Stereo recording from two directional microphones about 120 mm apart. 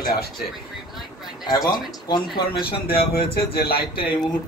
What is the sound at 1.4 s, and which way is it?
Speech, 35° left (ahead or behind).